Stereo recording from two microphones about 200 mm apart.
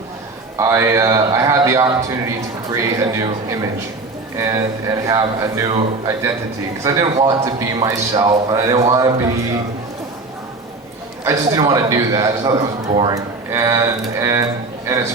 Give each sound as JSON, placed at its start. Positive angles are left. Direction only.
{"t": 0.5, "sound": "speech", "side_deg": -15}
{"t": 6.8, "sound": "speech", "side_deg": -15}
{"t": 11.3, "sound": "a man's voice", "side_deg": -20}